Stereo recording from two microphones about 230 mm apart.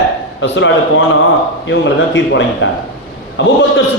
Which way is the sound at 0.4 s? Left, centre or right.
Left.